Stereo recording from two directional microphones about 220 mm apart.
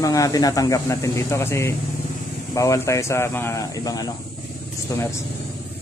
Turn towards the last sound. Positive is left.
turn(degrees=15)  # may be behind; listen again after turning